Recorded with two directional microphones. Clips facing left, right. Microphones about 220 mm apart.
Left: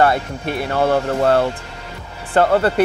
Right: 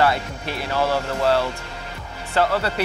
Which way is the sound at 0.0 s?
55° left (ahead or behind).